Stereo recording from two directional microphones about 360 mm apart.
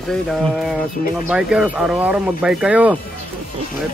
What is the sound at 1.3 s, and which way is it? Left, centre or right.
Speech, centre.